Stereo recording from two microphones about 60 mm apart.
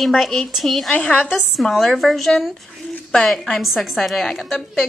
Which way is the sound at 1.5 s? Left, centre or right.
Centre.